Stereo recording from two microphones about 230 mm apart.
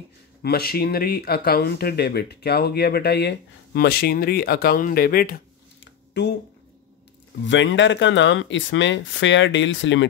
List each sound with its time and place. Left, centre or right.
0.4 s speech: left
7.4 s speech: left